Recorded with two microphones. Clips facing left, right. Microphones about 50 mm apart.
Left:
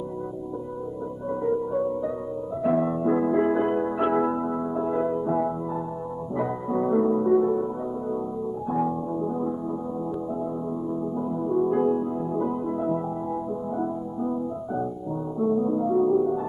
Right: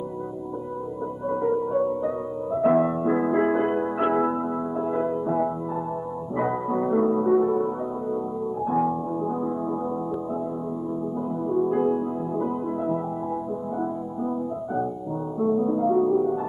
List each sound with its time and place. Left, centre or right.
1.3 s music: right; by 5.5 s centre
6.3 s music: right
11.4 s music: centre
15.4 s music: right